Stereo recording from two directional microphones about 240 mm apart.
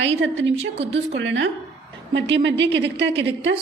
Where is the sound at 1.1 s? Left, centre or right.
Right.